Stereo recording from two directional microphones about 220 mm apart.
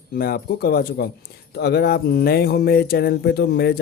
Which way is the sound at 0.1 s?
45° left (ahead or behind).